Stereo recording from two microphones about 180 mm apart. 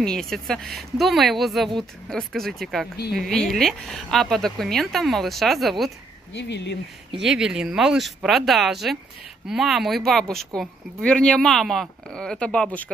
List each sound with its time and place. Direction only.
0.0 s speech: 5° left (ahead or behind)
6.3 s speech: 75° left (ahead or behind)
7.2 s speech: 5° right (ahead or behind)